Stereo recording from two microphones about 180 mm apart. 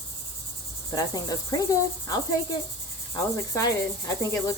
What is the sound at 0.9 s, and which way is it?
Cricket, 20° left (ahead or behind).